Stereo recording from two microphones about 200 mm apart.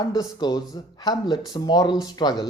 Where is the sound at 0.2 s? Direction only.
20° left (ahead or behind).